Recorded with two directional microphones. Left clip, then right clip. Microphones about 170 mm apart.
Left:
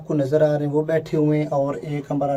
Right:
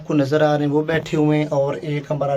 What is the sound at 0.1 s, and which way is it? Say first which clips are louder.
A man's voice: right 2 dB; 10° right (ahead or behind).